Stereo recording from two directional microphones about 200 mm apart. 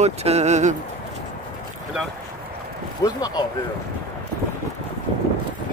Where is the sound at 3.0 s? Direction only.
20° left (ahead or behind).